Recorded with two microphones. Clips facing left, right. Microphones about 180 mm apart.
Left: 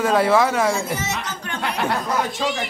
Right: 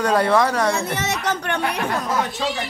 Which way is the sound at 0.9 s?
70° right (ahead or behind).